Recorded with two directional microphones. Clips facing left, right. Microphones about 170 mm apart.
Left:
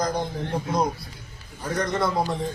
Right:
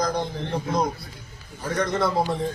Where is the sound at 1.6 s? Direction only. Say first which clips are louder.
Right 1 dB; centre (ahead or behind).